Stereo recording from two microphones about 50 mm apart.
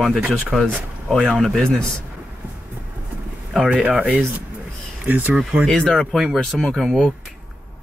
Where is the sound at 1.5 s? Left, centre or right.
Centre.